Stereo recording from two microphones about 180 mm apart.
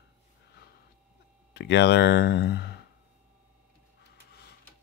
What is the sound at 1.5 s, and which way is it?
Speech, 70° left (ahead or behind).